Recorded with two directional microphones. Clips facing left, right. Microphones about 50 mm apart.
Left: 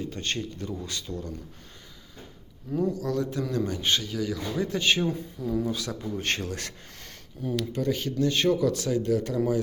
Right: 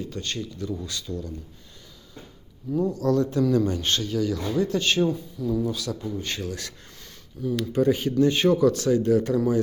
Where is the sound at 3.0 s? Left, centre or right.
Centre.